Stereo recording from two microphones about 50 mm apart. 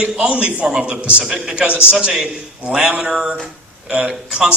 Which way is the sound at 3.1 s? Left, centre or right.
Centre.